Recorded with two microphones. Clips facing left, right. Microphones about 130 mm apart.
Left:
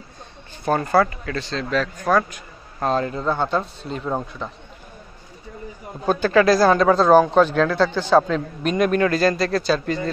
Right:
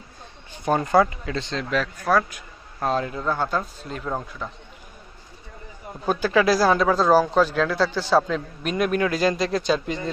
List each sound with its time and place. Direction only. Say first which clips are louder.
0.7 s a man's voice: left 1 dB; 10° right (ahead or behind)
1.6 s a man's voice: left 4 dB; 10° right (ahead or behind)
3.2 s speech: left 3 dB; 20° left (ahead or behind)
6.0 s a man's voice: left 3 dB; 10° right (ahead or behind)